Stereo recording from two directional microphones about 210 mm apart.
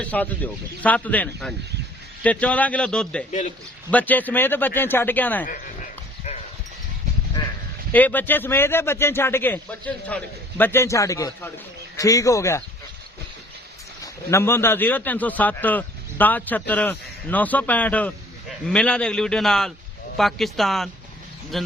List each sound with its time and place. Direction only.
0.0 s a man's voice: 5° left (ahead or behind)
7.9 s a man's voice: 10° left (ahead or behind)
14.0 s a man's voice: 15° left (ahead or behind)